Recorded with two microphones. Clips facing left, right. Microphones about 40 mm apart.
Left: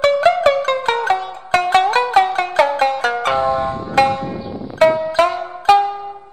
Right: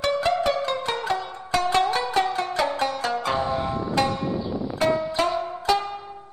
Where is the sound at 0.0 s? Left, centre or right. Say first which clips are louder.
Left 9 dB; left.